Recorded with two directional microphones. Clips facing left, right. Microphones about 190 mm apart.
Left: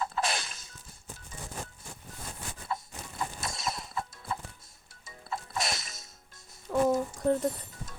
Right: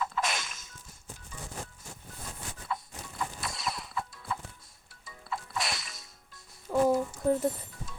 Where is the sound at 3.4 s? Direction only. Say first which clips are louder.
Left 1 dB; 45° left (ahead or behind).